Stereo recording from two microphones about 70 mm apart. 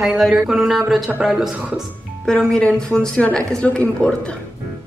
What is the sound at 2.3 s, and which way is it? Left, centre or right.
A woman's voice, centre.